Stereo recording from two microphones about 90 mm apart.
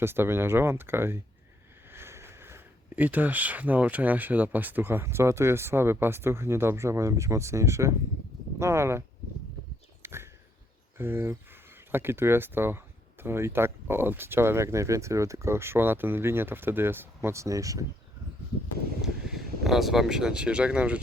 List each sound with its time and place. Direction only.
0.0 s speech: 25° right (ahead or behind)
10.0 s a sound: 30° right (ahead or behind)
10.9 s speech: 25° right (ahead or behind)
19.0 s speech: 5° right (ahead or behind)